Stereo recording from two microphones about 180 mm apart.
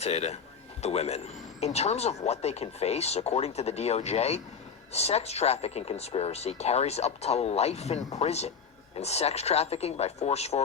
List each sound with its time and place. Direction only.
0.0 s speech: 35° left (ahead or behind)